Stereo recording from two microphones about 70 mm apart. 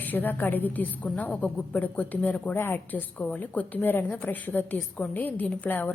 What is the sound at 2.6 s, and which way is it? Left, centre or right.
Speech, left.